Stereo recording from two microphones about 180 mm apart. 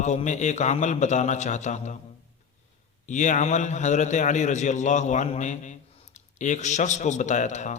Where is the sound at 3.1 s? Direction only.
45° left (ahead or behind).